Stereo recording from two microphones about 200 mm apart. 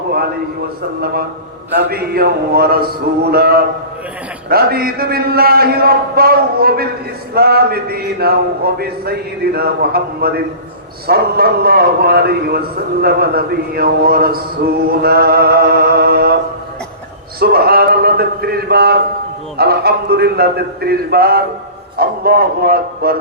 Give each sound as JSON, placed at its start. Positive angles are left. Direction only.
{"t": 1.7, "sound": "a man's voice", "side_deg": -50}
{"t": 17.4, "sound": "a man's voice", "side_deg": -50}